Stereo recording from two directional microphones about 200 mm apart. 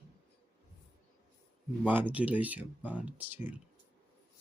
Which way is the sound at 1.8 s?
10° right (ahead or behind).